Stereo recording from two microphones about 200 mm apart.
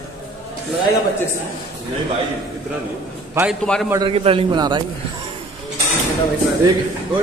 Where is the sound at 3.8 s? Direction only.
20° right (ahead or behind).